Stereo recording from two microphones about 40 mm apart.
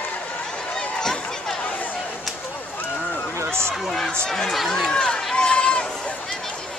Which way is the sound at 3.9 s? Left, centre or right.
Centre.